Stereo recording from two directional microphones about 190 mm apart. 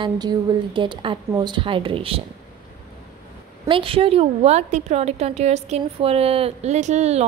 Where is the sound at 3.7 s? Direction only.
30° right (ahead or behind).